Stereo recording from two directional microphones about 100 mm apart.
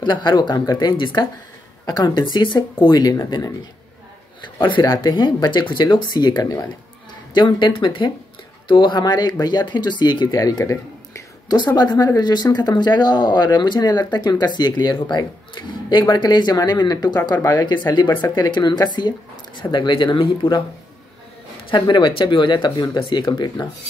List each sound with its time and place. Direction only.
0.0 s speech: 50° left (ahead or behind)
2.3 s speech: 55° left (ahead or behind)
2.8 s speech: 40° left (ahead or behind)
4.6 s speech: 50° left (ahead or behind); by 11.5 s 30° left (ahead or behind)
11.5 s speech: 45° left (ahead or behind)
21.6 s speech: 50° left (ahead or behind)